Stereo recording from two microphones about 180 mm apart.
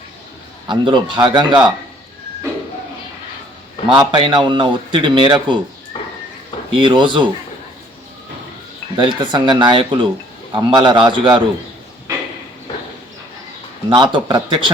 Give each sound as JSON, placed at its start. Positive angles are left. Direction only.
{"t": 0.7, "sound": "a man's voice", "side_deg": -25}
{"t": 3.9, "sound": "a man's voice", "side_deg": -25}
{"t": 5.9, "sound": "a sound", "side_deg": 25}
{"t": 6.7, "sound": "a man's voice", "side_deg": -25}
{"t": 9.0, "sound": "a man's voice", "side_deg": -25}
{"t": 13.9, "sound": "a man's voice", "side_deg": -25}